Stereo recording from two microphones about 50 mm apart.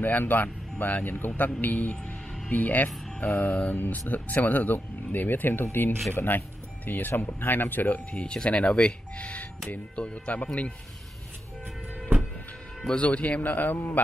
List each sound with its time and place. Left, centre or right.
0.0 s speech: left
13.0 s speech: left